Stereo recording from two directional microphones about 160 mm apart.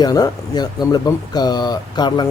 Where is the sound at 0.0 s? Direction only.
25° left (ahead or behind).